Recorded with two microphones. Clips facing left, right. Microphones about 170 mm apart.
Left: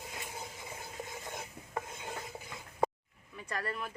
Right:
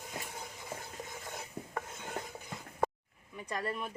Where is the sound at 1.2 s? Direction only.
10° left (ahead or behind).